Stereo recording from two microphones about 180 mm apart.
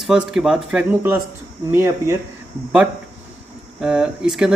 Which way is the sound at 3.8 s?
5° right (ahead or behind).